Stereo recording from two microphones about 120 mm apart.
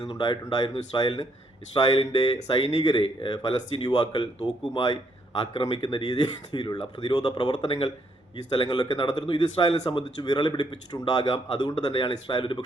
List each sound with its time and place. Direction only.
0.1 s speech: 35° left (ahead or behind)
5.5 s speech: 50° left (ahead or behind)
8.4 s speech: 40° left (ahead or behind)